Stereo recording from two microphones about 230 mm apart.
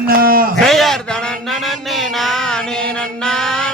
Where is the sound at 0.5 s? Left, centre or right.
Centre.